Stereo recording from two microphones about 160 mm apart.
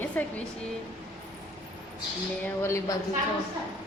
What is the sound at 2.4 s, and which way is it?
Speech, 15° left (ahead or behind).